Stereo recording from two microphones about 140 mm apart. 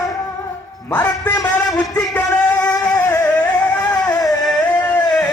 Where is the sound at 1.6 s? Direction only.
25° left (ahead or behind).